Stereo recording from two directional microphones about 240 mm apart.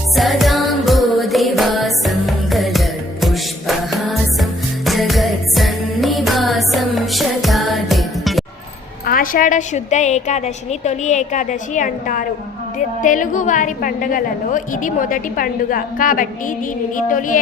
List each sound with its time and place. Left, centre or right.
0.2 s music: centre
9.0 s a woman's voice: left